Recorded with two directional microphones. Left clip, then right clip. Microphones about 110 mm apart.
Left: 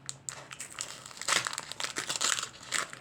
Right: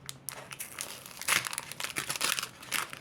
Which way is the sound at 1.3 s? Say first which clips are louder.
Even; 25° right (ahead or behind).